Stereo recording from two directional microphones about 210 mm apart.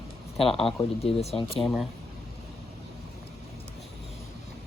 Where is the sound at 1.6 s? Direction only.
Centre (ahead or behind).